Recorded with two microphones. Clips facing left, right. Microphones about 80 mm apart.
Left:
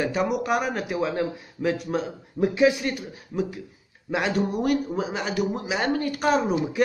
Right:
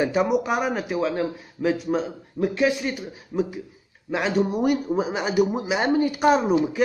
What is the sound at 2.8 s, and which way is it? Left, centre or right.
A man's voice, centre.